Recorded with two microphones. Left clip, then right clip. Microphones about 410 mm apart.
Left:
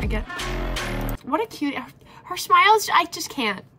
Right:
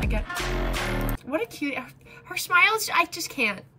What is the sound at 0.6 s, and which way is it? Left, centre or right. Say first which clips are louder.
Music: even; centre.